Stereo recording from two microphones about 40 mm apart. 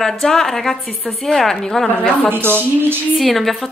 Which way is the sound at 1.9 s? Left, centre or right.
Left.